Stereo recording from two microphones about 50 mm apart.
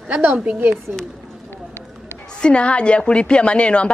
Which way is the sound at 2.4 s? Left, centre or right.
Left.